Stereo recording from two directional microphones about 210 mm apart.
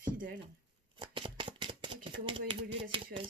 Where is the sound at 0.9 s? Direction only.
25° right (ahead or behind).